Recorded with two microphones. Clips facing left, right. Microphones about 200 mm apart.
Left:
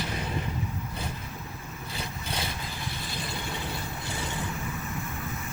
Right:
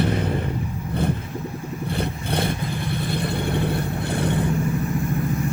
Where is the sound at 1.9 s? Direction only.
60° right (ahead or behind).